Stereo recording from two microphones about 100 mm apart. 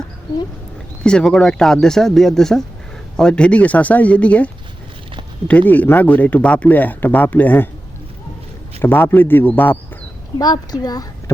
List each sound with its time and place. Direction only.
1.0 s speech: 5° left (ahead or behind)
8.8 s a man's voice: 20° left (ahead or behind)
10.3 s a woman's voice: 40° left (ahead or behind)